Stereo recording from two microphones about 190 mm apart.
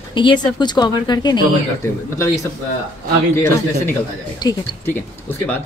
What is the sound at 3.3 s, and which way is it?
Speech, 15° left (ahead or behind).